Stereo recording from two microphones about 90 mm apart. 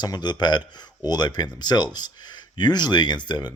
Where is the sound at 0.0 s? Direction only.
55° left (ahead or behind).